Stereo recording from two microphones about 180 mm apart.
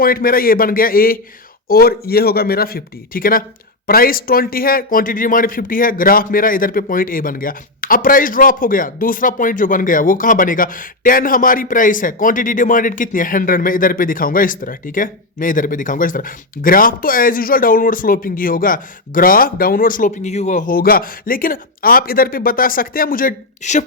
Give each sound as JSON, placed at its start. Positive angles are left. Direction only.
{"t": 0.0, "sound": "a man's voice", "side_deg": 55}